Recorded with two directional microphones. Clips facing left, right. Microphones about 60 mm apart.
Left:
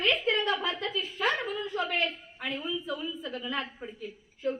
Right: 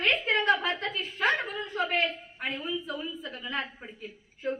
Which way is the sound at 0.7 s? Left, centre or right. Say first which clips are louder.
Even; right.